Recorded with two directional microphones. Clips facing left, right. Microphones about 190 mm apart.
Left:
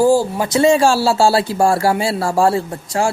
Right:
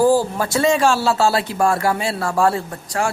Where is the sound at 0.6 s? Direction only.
30° left (ahead or behind).